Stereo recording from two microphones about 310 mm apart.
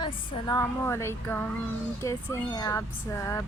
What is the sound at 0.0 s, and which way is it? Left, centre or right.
Speech, centre.